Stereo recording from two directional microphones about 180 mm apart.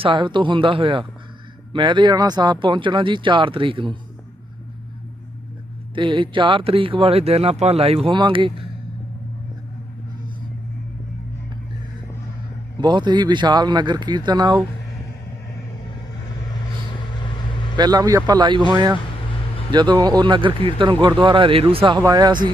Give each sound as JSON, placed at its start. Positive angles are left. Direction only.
{"t": 0.0, "sound": "speech", "side_deg": -25}
{"t": 5.9, "sound": "speech", "side_deg": -25}
{"t": 12.8, "sound": "speech", "side_deg": -25}
{"t": 17.7, "sound": "speech", "side_deg": -20}